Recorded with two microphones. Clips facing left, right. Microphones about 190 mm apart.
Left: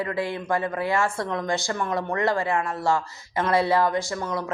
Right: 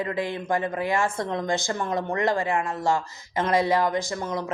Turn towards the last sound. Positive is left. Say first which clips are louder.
# even
turn(degrees=-20)  # may be behind; listen again after turning